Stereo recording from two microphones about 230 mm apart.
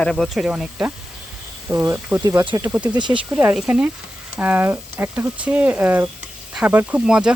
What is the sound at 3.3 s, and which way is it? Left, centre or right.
Speech, centre.